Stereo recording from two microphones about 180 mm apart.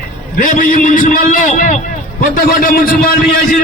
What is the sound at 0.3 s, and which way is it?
A man's voice, 45° left (ahead or behind).